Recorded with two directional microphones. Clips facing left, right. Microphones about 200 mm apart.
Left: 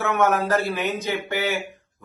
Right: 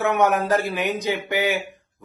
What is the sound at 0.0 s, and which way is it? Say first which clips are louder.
Speech: right 1 dB; 15° right (ahead or behind).